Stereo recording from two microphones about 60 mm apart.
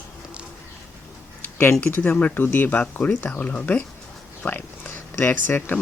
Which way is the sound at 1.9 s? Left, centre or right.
Left.